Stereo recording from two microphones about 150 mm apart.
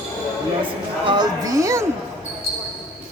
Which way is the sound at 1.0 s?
30° right (ahead or behind).